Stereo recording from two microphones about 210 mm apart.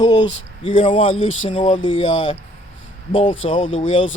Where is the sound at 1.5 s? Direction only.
25° left (ahead or behind).